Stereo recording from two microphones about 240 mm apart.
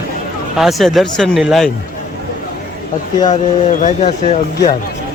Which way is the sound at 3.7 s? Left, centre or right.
Left.